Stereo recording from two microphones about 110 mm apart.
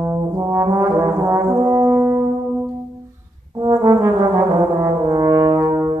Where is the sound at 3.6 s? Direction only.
30° right (ahead or behind).